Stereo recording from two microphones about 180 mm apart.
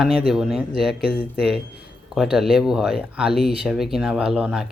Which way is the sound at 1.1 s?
60° left (ahead or behind).